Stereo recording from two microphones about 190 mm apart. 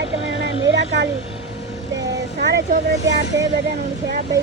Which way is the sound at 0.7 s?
70° right (ahead or behind).